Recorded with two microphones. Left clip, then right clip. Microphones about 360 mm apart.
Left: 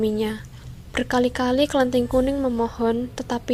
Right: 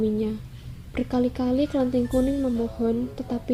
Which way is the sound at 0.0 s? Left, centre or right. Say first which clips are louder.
Left 3 dB; left.